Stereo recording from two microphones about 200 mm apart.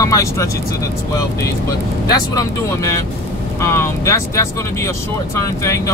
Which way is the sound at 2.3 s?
15° left (ahead or behind).